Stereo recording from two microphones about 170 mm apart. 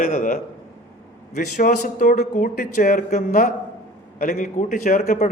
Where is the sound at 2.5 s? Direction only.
60° left (ahead or behind).